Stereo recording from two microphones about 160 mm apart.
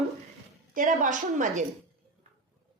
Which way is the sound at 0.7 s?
55° right (ahead or behind).